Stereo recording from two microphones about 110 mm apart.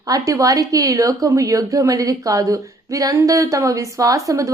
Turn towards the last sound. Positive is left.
turn(degrees=-30)  # may be behind; listen again after turning